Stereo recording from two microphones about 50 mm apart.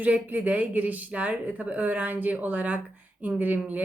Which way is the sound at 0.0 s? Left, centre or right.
Right.